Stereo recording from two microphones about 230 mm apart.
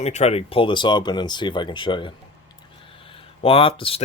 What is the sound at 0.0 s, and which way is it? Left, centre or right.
Speech, left.